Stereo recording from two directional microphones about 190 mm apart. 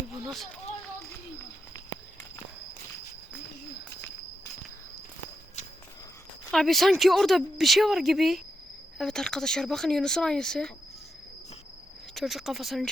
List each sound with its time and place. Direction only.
6.5 s speech: centre (ahead or behind)
12.1 s speech: centre (ahead or behind)